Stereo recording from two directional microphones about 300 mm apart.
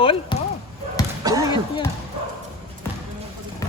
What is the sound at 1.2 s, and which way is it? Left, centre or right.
Speech, centre.